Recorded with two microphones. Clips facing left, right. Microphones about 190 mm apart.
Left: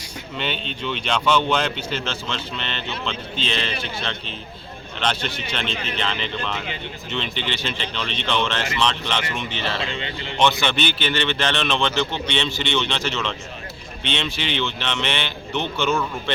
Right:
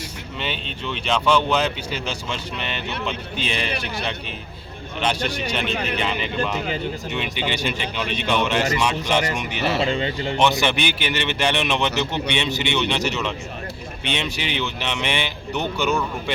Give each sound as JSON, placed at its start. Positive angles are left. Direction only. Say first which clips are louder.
{"t": 0.3, "sound": "speech", "louder": "left 2 dB", "side_deg": 0}
{"t": 9.8, "sound": "speech", "louder": "right 7 dB", "side_deg": -40}
{"t": 10.6, "sound": "speech", "louder": "right 1 dB", "side_deg": -10}